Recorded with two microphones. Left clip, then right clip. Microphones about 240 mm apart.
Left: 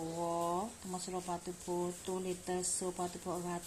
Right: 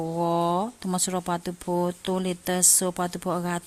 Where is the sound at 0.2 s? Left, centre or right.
Right.